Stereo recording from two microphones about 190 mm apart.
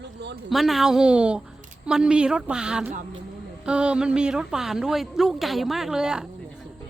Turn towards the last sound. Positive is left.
turn(degrees=-5)  # may be behind; listen again after turning